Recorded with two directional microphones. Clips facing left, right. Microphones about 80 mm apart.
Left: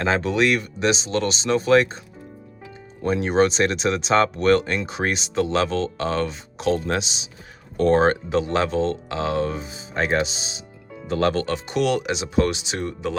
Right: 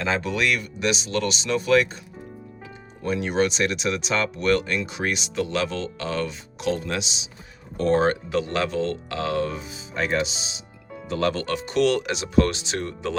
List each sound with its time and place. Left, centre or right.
0.0 s speech: left
3.0 s speech: left
8.4 s speech: left
11.4 s speech: centre